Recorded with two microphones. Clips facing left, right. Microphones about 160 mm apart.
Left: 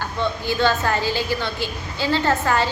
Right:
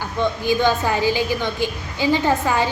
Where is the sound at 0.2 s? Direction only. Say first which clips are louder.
Right 3 dB; 15° right (ahead or behind).